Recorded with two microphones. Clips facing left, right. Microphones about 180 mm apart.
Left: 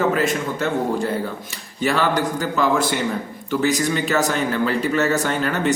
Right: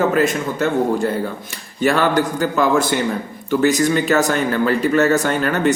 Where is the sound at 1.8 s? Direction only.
50° right (ahead or behind).